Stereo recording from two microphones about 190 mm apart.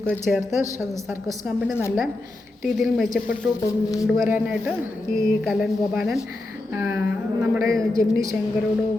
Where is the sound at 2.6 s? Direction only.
Centre (ahead or behind).